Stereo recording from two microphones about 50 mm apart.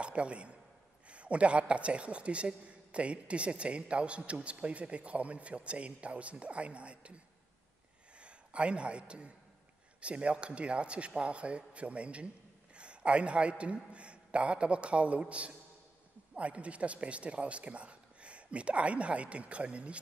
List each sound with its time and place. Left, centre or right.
0.0 s a man's voice: right
8.2 s a man's voice: right